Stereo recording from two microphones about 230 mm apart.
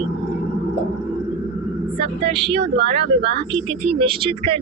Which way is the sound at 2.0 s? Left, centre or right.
Right.